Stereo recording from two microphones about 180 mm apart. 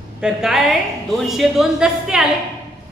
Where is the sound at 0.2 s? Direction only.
Centre (ahead or behind).